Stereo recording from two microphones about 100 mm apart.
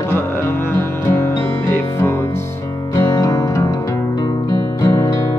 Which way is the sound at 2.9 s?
40° left (ahead or behind).